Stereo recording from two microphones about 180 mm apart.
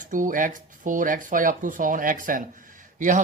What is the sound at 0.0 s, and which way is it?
Speech, 45° right (ahead or behind).